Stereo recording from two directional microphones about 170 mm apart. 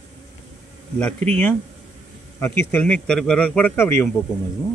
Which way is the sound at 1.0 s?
10° left (ahead or behind).